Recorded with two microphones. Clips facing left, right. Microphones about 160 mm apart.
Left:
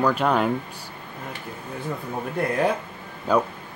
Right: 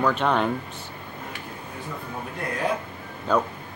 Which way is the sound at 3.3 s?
10° left (ahead or behind).